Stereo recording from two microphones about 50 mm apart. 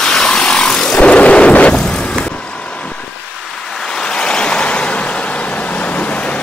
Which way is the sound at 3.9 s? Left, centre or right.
Centre.